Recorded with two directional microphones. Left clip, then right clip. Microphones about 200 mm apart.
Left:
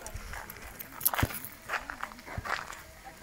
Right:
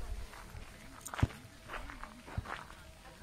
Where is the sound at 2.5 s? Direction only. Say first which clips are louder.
Left 10 dB; 55° left (ahead or behind).